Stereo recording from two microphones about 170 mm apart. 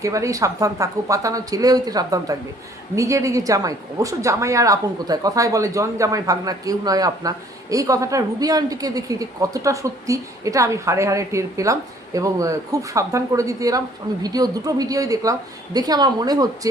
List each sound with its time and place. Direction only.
0.0 s a woman's voice: 20° right (ahead or behind)